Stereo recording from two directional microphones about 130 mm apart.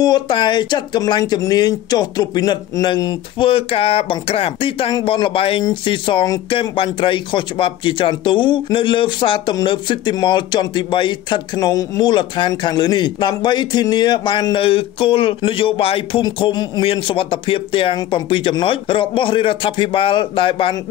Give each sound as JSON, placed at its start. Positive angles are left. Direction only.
{"t": 0.0, "sound": "speech", "side_deg": 35}
{"t": 3.4, "sound": "speech", "side_deg": 45}